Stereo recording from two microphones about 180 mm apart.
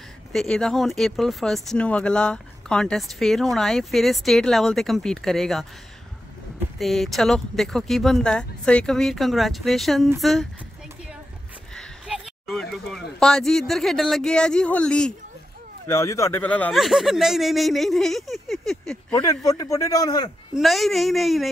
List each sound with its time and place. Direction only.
0.3 s speech: 5° left (ahead or behind)
6.8 s speech: centre (ahead or behind)
11.7 s speech: centre (ahead or behind)
15.9 s speech: 15° left (ahead or behind)
19.1 s speech: 20° left (ahead or behind)
20.5 s speech: centre (ahead or behind)